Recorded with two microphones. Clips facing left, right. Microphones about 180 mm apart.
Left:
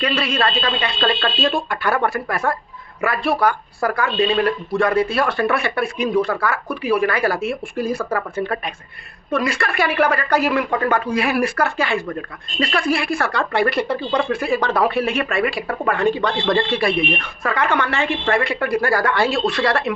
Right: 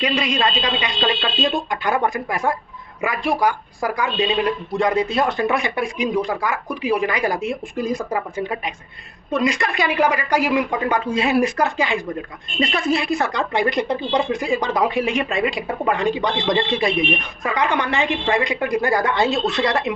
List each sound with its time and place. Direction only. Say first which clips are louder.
0.0 s a woman's voice: even; 15° right (ahead or behind)